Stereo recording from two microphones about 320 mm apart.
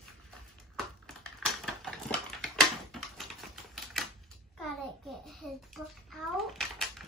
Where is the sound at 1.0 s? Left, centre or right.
Centre.